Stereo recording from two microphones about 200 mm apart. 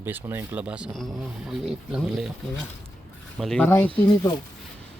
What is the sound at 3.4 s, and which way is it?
Speech, 5° left (ahead or behind).